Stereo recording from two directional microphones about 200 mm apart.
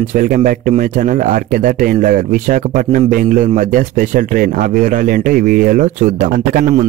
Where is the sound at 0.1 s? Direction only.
40° right (ahead or behind).